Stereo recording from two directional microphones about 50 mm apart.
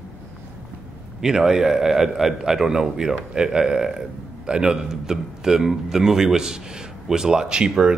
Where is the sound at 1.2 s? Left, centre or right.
Centre.